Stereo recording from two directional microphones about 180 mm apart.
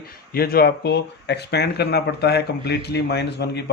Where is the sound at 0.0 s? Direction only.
55° left (ahead or behind).